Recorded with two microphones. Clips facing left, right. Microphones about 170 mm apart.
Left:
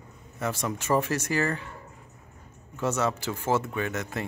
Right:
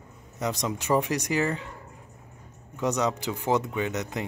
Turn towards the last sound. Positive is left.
turn(degrees=-20)  # may be behind; listen again after turning